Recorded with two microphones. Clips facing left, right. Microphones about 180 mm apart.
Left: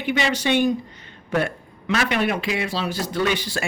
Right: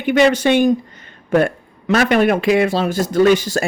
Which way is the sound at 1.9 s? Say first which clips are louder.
Right 8 dB; 45° right (ahead or behind).